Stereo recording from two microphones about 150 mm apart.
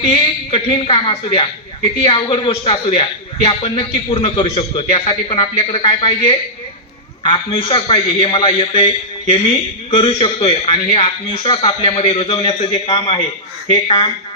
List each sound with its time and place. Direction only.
0.0 s a man's voice: 35° left (ahead or behind)